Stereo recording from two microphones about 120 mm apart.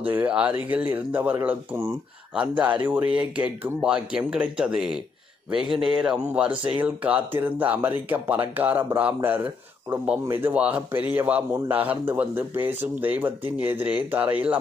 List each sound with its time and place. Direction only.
0.0 s speech: 15° right (ahead or behind)